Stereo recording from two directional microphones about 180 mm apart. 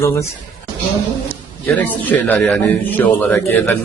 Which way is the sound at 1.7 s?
10° left (ahead or behind).